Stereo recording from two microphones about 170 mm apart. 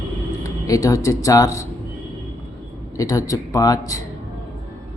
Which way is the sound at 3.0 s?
20° left (ahead or behind).